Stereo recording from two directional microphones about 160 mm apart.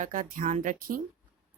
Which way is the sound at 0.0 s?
55° right (ahead or behind).